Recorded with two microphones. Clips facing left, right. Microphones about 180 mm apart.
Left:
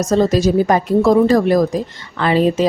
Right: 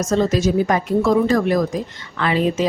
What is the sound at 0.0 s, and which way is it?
A woman's voice, 35° left (ahead or behind).